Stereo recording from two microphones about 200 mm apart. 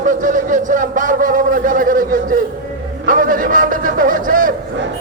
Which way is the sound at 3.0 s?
45° right (ahead or behind).